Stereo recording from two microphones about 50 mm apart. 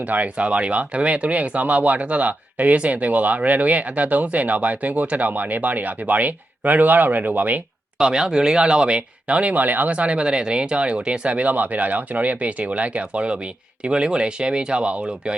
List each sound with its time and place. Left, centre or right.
0.1 s speech: right
7.9 s speech: centre